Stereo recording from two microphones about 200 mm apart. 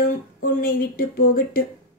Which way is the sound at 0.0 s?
45° left (ahead or behind).